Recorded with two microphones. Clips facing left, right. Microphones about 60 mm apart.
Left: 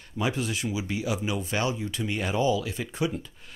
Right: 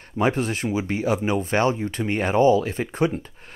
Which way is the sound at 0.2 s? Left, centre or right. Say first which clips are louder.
Right 6 dB; right.